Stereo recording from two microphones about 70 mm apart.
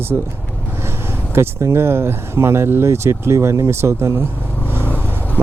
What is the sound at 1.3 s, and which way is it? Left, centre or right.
Speech, right.